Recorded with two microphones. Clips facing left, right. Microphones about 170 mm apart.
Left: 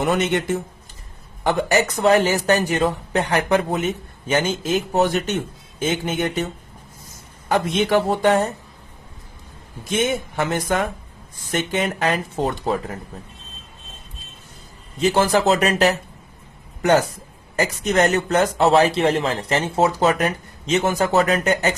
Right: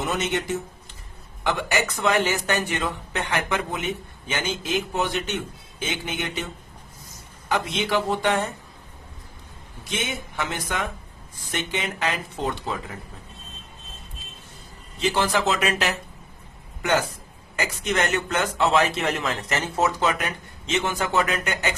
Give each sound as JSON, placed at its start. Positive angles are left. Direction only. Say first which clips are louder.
{"t": 0.0, "sound": "a man's voice", "louder": "left 6 dB", "side_deg": 60}
{"t": 1.5, "sound": "a man's voice", "louder": "left 6 dB", "side_deg": 40}
{"t": 7.4, "sound": "speech", "louder": "left 6 dB", "side_deg": 50}
{"t": 9.9, "sound": "speech", "louder": "left 9 dB", "side_deg": 45}
{"t": 14.9, "sound": "a man's voice", "louder": "left 6 dB", "side_deg": 45}
{"t": 17.6, "sound": "a man's voice", "louder": "left 7 dB", "side_deg": 40}